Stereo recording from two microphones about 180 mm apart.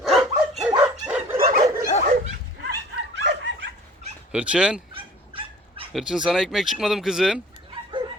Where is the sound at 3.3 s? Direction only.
75° right (ahead or behind).